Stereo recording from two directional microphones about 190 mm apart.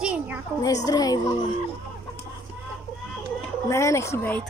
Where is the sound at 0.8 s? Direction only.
20° left (ahead or behind).